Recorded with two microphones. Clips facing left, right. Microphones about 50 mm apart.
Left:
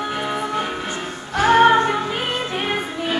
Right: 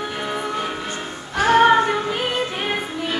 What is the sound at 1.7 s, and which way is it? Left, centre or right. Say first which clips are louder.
Music: even; centre.